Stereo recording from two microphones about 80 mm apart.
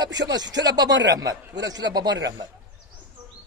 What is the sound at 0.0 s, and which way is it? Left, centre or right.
A man's voice, right.